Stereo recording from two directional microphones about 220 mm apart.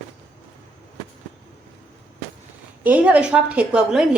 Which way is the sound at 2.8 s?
5° right (ahead or behind).